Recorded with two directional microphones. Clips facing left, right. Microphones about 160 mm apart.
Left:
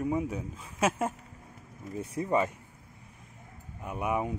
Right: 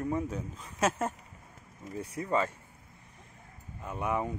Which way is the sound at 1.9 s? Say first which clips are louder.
Left 2 dB; 25° left (ahead or behind).